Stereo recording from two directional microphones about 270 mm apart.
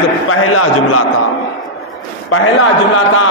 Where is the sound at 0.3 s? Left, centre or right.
Left.